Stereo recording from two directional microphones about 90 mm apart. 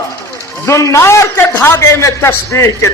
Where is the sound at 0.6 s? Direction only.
35° left (ahead or behind).